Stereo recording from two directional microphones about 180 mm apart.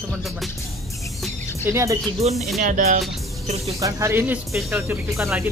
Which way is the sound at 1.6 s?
15° right (ahead or behind).